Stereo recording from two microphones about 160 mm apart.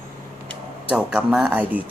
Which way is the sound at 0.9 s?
5° right (ahead or behind).